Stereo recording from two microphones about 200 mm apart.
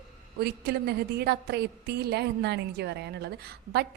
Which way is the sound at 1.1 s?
55° right (ahead or behind).